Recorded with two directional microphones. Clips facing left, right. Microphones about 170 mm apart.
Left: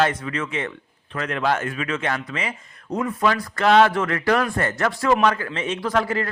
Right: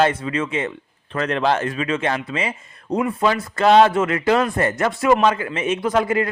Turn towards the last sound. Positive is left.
turn(degrees=-20)  # may be behind; listen again after turning